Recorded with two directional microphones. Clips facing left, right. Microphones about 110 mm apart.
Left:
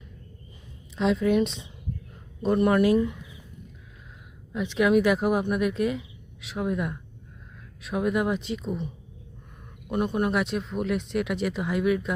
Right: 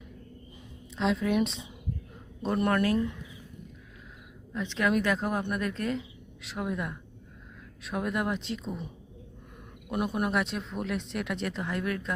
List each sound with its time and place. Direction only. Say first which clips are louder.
0.9 s speech: left 4 dB; centre (ahead or behind)
2.8 s speech: left 6 dB; 15° left (ahead or behind)
4.5 s speech: left 6 dB; 10° left (ahead or behind)
9.9 s speech: left 4 dB; centre (ahead or behind)